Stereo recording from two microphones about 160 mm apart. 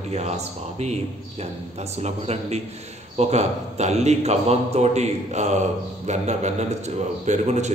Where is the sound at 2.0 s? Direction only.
40° right (ahead or behind).